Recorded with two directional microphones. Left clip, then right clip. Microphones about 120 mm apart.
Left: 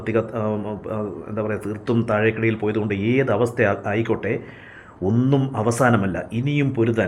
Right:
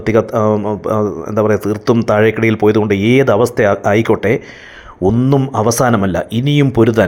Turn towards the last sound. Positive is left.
turn(degrees=-40)  # may be behind; listen again after turning